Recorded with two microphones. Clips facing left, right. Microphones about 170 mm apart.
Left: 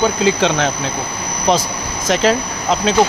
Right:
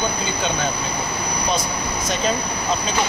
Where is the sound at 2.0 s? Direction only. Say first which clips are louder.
Left 9 dB; 90° left.